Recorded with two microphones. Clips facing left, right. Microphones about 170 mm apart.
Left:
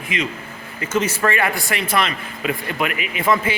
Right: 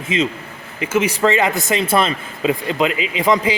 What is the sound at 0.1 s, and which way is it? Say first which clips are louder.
Speech: right 6 dB; 25° right (ahead or behind).